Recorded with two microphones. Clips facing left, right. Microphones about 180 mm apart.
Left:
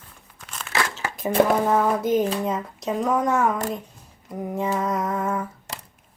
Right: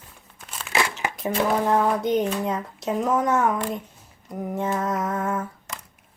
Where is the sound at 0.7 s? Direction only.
15° right (ahead or behind).